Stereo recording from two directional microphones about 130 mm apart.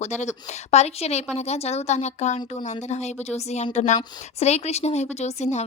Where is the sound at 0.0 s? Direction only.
65° left (ahead or behind).